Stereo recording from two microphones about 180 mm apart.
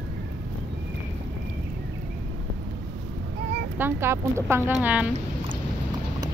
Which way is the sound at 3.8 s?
10° right (ahead or behind).